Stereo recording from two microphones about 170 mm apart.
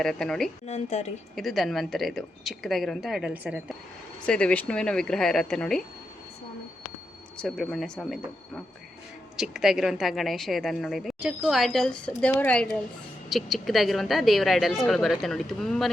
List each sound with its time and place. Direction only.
0.0 s a woman's voice: 5° left (ahead or behind)
0.7 s a woman's voice: 40° left (ahead or behind)
1.4 s a woman's voice: centre (ahead or behind)
4.3 s a woman's voice: 5° left (ahead or behind)
7.4 s a woman's voice: centre (ahead or behind)